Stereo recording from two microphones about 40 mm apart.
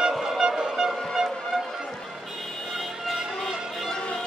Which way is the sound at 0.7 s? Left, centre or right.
Centre.